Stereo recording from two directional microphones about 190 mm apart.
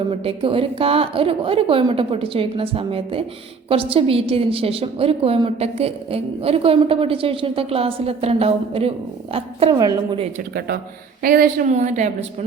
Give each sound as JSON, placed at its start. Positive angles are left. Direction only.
{"t": 0.1, "sound": "a woman's voice", "side_deg": -30}
{"t": 11.2, "sound": "a woman's voice", "side_deg": -50}